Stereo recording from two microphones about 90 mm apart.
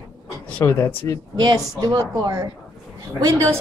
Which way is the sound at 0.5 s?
25° left (ahead or behind).